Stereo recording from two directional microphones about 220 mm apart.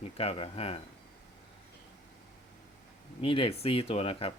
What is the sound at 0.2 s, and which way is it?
Speech, 25° left (ahead or behind).